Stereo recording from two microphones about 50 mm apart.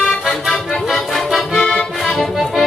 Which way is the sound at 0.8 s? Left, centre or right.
Centre.